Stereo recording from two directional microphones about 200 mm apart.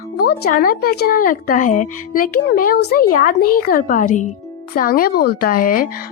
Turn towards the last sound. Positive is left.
turn(degrees=45)  # may be behind; listen again after turning